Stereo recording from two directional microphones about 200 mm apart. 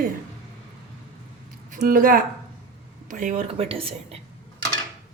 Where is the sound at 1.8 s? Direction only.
45° right (ahead or behind).